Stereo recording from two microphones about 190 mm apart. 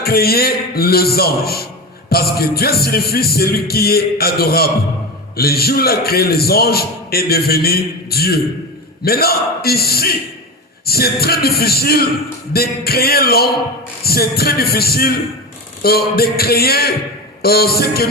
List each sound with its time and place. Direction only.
0.0 s a man's voice: 55° left (ahead or behind)